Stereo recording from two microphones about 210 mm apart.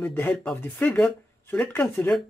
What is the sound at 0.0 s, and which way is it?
Speech, 5° left (ahead or behind).